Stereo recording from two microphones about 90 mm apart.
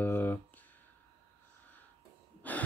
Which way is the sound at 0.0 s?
20° left (ahead or behind).